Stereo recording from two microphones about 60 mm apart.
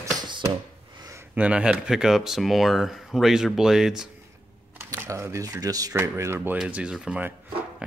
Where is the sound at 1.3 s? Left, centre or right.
Right.